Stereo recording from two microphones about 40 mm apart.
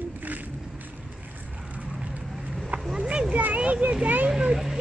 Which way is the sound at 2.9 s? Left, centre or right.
Right.